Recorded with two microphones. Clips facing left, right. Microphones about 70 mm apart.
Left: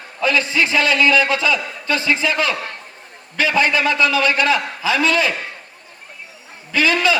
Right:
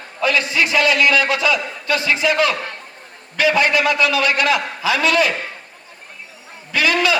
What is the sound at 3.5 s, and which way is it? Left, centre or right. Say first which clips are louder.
A man's voice: left 2 dB; left.